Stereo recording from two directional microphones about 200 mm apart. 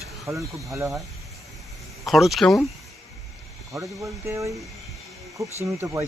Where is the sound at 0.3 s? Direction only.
15° right (ahead or behind).